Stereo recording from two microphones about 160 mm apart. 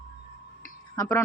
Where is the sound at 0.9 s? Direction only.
20° left (ahead or behind).